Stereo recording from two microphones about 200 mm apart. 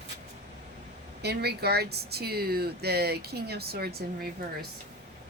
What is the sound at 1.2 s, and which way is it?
Speech, 55° right (ahead or behind).